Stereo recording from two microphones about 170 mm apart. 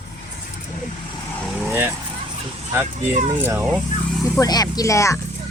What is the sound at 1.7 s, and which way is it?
Vehicle, 15° right (ahead or behind).